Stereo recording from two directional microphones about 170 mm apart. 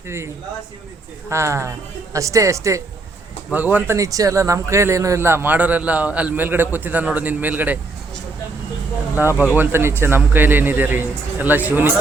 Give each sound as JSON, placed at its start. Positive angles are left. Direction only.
{"t": 1.3, "sound": "speech", "side_deg": -15}
{"t": 9.3, "sound": "speech", "side_deg": 10}
{"t": 9.6, "sound": "speech", "side_deg": -15}